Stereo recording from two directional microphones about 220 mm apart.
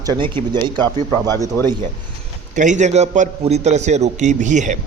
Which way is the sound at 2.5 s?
35° right (ahead or behind).